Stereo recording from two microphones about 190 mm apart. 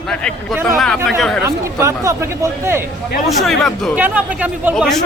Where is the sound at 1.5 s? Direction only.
15° right (ahead or behind).